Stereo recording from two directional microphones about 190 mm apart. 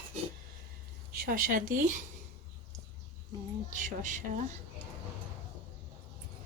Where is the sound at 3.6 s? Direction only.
40° right (ahead or behind).